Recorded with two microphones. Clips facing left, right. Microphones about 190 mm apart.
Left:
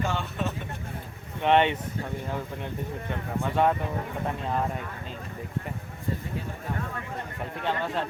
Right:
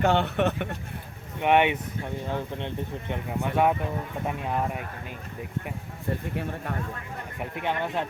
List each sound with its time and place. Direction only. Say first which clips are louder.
0.0 s speech: right 7 dB; 65° right (ahead or behind)
1.4 s speech: right 1 dB; 10° right (ahead or behind)
3.1 s speech: right 1 dB; 15° right (ahead or behind)
6.1 s speech: right 2 dB; 65° right (ahead or behind)
7.3 s speech: right 1 dB; 15° right (ahead or behind)